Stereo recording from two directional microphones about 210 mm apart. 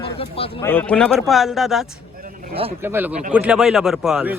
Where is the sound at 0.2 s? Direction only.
25° left (ahead or behind).